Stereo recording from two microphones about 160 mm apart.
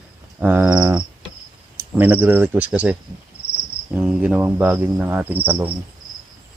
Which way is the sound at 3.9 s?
5° right (ahead or behind).